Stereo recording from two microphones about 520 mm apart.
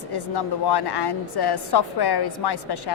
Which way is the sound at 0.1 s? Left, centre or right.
Left.